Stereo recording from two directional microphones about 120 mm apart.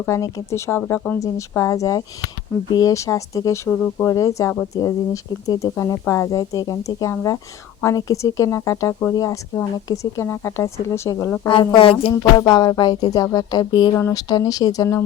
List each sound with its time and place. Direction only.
0.0 s speech: 25° left (ahead or behind)
0.9 s speech: 15° left (ahead or behind)
1.2 s speech: 25° left (ahead or behind)
11.4 s a woman's voice: 45° left (ahead or behind)
12.1 s music: 35° left (ahead or behind)
13.9 s music: 25° left (ahead or behind)